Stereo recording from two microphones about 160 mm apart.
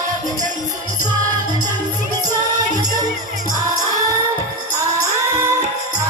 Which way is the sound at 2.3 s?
25° right (ahead or behind).